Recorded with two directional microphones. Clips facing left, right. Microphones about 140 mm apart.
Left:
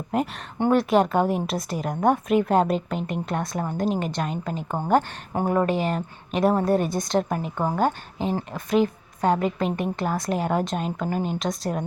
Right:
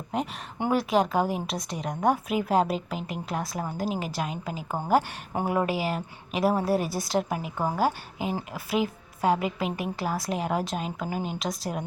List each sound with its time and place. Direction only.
0.1 s speech: centre (ahead or behind)
7.5 s speech: 20° left (ahead or behind)
7.8 s speech: 5° right (ahead or behind)